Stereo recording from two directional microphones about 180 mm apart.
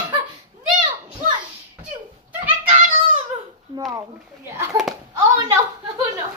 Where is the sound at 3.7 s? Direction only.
20° right (ahead or behind).